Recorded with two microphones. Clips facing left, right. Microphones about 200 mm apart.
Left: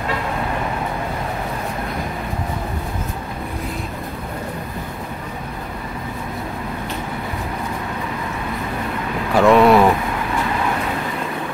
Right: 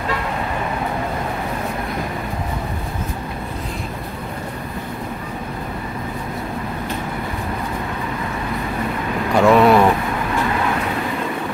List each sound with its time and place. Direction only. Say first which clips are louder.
9.3 s vehicle: left 1 dB; centre (ahead or behind)